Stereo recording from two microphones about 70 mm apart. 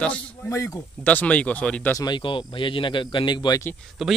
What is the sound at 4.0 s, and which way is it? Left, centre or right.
Speech, centre.